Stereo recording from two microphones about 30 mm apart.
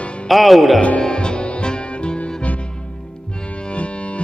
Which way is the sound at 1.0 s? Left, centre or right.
Left.